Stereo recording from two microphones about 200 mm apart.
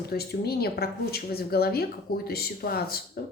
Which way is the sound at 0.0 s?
50° left (ahead or behind).